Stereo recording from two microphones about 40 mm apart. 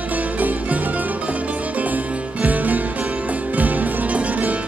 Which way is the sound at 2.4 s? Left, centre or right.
Right.